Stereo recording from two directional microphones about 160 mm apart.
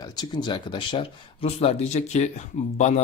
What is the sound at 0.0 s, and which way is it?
A man's voice, 25° left (ahead or behind).